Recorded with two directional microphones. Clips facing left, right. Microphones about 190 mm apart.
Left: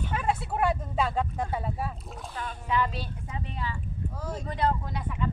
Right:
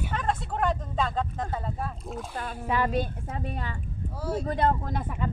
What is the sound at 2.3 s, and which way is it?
Speech, 50° right (ahead or behind).